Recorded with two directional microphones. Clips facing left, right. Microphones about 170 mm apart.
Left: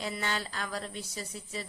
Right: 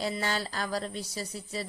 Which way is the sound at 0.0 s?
35° right (ahead or behind).